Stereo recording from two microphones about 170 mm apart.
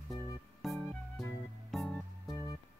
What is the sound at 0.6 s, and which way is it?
Music, centre (ahead or behind).